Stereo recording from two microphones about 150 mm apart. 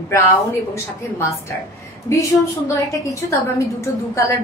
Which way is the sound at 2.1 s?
20° left (ahead or behind).